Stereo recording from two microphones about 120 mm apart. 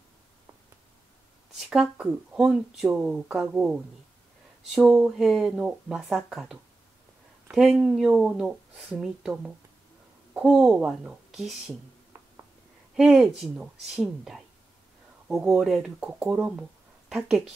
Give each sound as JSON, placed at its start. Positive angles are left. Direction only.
{"t": 1.7, "sound": "speech", "side_deg": -5}
{"t": 10.3, "sound": "speech", "side_deg": -10}
{"t": 12.1, "sound": "a sound", "side_deg": -25}
{"t": 12.9, "sound": "speech", "side_deg": -5}